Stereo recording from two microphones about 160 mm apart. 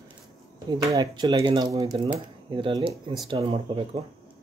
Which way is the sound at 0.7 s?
25° right (ahead or behind).